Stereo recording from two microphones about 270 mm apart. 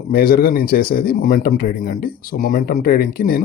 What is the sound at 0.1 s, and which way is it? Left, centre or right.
Speech, left.